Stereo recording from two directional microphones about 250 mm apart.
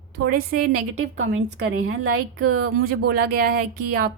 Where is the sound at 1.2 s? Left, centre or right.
Right.